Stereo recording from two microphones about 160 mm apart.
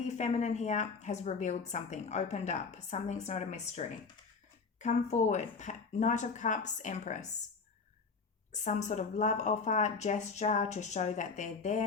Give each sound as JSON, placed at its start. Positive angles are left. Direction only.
{"t": 0.1, "sound": "a woman's voice", "side_deg": 45}
{"t": 8.5, "sound": "a woman's voice", "side_deg": 50}